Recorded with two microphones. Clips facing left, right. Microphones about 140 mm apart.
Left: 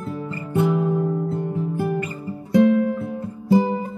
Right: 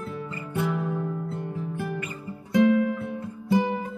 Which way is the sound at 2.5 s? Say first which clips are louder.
Left 4 dB; 40° left (ahead or behind).